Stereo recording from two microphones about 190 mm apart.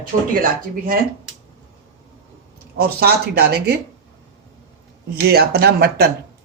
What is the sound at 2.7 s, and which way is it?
A woman's voice, 55° right (ahead or behind).